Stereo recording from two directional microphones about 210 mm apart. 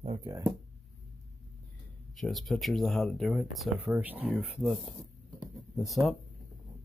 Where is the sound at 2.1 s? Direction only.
Centre (ahead or behind).